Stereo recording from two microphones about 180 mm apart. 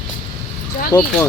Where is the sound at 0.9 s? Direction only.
25° left (ahead or behind).